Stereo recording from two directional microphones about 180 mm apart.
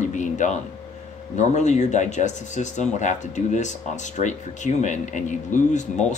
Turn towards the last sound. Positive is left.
turn(degrees=40)  # may be behind; listen again after turning